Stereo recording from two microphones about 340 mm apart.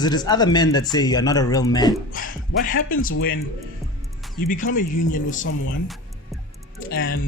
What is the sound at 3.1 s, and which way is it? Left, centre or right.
Speech, left.